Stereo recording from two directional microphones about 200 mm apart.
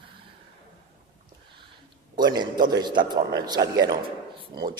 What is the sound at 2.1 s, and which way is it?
A man's voice, 20° right (ahead or behind).